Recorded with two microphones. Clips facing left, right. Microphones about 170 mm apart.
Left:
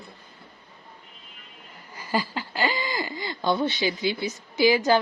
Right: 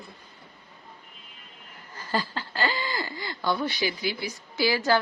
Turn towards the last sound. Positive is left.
turn(degrees=20)  # may be behind; listen again after turning